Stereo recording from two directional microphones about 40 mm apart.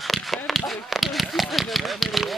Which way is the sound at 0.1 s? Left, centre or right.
Centre.